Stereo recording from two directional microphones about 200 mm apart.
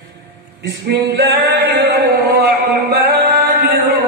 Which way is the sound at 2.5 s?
55° right (ahead or behind).